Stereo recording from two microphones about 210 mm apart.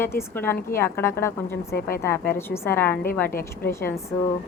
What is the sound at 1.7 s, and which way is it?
Speech, 45° left (ahead or behind).